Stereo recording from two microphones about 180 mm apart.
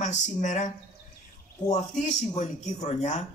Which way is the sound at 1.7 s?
40° left (ahead or behind).